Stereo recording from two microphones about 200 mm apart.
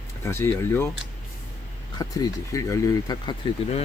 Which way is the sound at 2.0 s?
20° left (ahead or behind).